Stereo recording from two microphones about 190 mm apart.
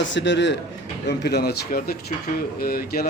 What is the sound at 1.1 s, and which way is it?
Speech, 60° left (ahead or behind).